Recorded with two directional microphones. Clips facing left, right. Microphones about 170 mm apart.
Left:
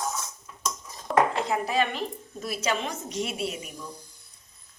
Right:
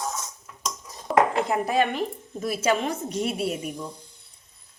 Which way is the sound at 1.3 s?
55° right (ahead or behind).